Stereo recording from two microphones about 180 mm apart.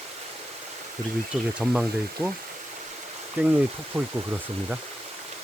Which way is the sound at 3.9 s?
30° right (ahead or behind).